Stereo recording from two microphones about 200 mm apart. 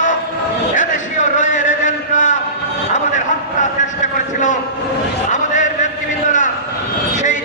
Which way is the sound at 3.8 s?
40° left (ahead or behind).